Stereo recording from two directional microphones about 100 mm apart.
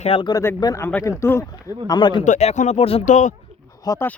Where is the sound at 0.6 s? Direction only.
45° left (ahead or behind).